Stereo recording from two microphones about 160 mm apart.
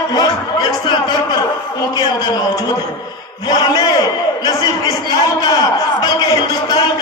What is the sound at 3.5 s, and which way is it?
A man's voice, 25° left (ahead or behind).